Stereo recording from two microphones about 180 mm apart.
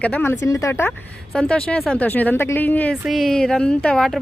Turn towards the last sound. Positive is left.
turn(degrees=5)  # may be behind; listen again after turning